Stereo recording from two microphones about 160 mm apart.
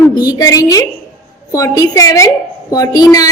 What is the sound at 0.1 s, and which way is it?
A woman's voice, 25° left (ahead or behind).